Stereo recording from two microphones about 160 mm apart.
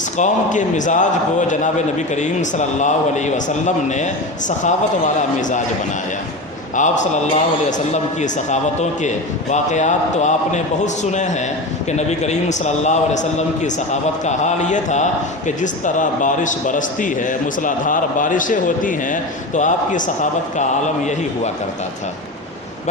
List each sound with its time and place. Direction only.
0.2 s a man's voice: 50° left (ahead or behind)
6.7 s a man's voice: 50° left (ahead or behind)
8.2 s a man's voice: 50° left (ahead or behind)